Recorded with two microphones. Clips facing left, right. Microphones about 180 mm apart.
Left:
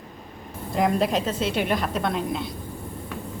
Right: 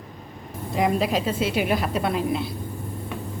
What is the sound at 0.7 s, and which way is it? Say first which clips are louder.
A woman's voice: even; centre (ahead or behind).